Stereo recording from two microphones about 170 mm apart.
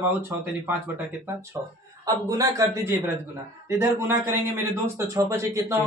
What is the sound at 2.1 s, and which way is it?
A man's voice, 20° right (ahead or behind).